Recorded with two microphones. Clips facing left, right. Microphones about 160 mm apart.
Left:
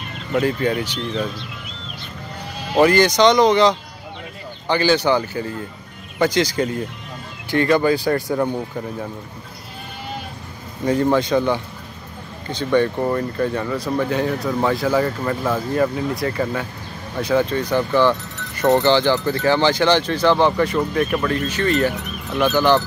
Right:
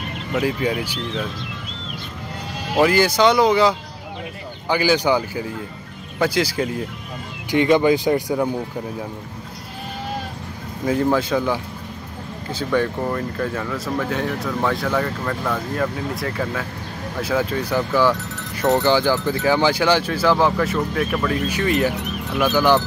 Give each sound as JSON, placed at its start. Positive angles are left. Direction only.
{"t": 0.3, "sound": "speech", "side_deg": -5}
{"t": 2.7, "sound": "speech", "side_deg": -5}
{"t": 7.5, "sound": "speech", "side_deg": -15}
{"t": 10.9, "sound": "speech", "side_deg": -5}